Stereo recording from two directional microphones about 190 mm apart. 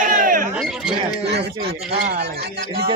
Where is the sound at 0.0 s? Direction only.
45° right (ahead or behind).